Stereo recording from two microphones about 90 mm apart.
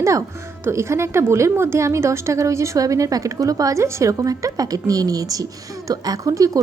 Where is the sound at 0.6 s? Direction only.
30° right (ahead or behind).